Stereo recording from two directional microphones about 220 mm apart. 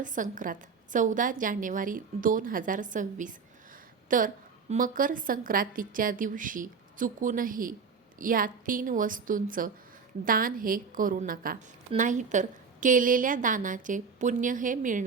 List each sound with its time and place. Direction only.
0.0 s a woman's voice: 35° right (ahead or behind)